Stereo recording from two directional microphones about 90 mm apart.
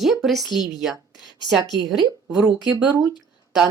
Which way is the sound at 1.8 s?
Centre (ahead or behind).